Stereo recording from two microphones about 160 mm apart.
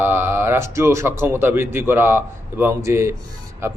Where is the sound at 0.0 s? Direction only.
15° right (ahead or behind).